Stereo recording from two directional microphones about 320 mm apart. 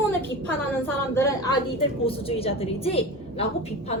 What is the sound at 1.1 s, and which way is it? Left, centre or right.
A woman's voice, centre.